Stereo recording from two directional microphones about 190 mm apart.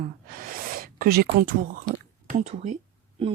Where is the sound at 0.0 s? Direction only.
45° right (ahead or behind).